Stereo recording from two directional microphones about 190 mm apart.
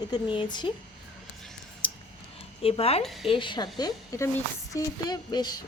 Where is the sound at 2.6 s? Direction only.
30° left (ahead or behind).